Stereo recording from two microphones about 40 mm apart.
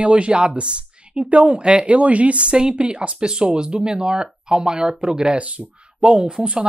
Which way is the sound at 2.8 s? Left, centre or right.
Right.